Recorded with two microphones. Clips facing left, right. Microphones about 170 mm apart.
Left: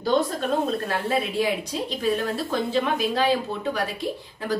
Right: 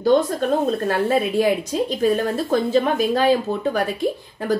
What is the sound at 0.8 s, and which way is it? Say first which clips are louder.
A woman's voice: right 6 dB; 50° right (ahead or behind).